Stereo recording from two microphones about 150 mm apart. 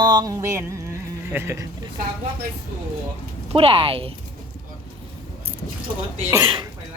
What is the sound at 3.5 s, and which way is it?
Speech, 35° right (ahead or behind).